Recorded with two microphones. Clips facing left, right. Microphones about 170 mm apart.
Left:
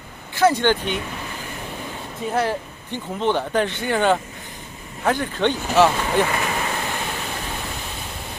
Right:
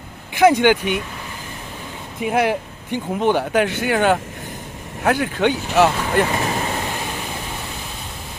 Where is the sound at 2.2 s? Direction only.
15° right (ahead or behind).